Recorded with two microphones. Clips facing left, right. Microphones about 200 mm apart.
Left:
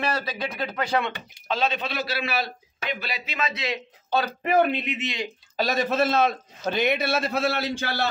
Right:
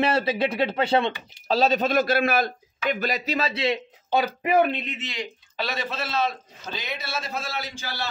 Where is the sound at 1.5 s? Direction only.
40° right (ahead or behind).